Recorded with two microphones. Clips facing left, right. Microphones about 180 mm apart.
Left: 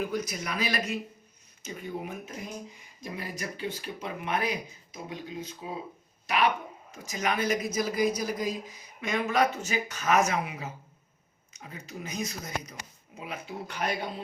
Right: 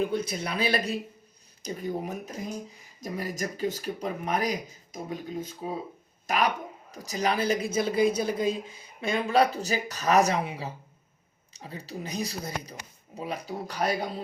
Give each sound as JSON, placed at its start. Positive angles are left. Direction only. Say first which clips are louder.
{"t": 0.0, "sound": "a woman's voice", "louder": "right 3 dB", "side_deg": -30}